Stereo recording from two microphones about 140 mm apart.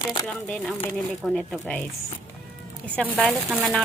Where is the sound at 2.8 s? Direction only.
10° left (ahead or behind).